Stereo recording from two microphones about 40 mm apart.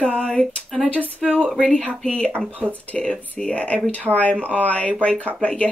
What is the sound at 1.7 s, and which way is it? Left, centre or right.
A woman's voice, left.